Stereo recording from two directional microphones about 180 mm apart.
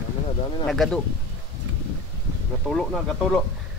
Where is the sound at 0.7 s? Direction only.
Centre (ahead or behind).